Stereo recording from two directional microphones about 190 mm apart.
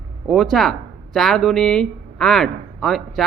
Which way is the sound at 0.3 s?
Centre (ahead or behind).